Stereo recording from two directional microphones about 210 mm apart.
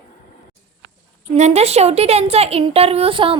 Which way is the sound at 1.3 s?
30° right (ahead or behind).